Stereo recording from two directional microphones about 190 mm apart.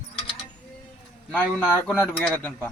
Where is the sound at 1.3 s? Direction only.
5° left (ahead or behind).